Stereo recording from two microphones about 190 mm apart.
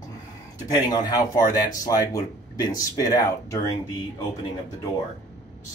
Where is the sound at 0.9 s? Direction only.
20° left (ahead or behind).